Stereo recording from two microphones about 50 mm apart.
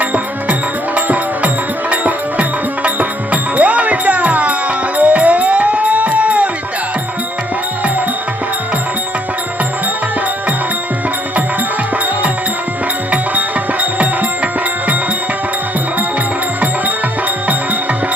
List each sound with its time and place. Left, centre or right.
0.0 s music: right
14.0 s music: right